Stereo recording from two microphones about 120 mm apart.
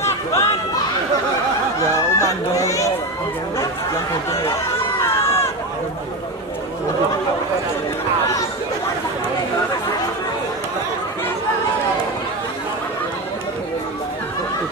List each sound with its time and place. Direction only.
0.0 s chatter: 25° left (ahead or behind)
2.1 s a sound: 25° left (ahead or behind)
5.0 s run: 20° left (ahead or behind)